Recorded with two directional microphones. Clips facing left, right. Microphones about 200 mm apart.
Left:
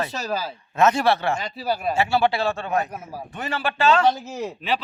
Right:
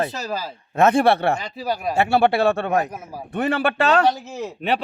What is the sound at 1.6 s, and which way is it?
Speech, 5° left (ahead or behind).